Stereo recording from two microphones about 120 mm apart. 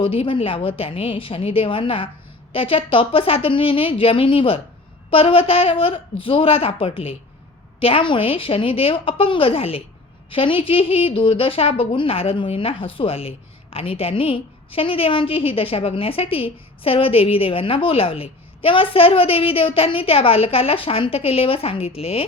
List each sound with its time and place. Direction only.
0.0 s a woman's voice: 50° left (ahead or behind)